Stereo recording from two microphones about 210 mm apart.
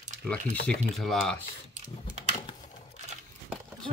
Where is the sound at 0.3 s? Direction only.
5° left (ahead or behind).